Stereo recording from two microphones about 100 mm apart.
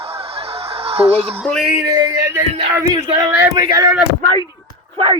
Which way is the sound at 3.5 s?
35° right (ahead or behind).